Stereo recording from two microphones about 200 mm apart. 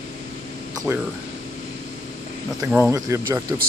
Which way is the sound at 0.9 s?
10° right (ahead or behind).